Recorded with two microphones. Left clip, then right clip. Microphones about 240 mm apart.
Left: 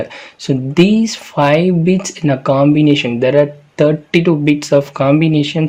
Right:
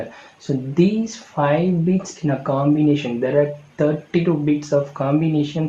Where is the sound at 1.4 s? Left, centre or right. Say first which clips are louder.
Left 7 dB; left.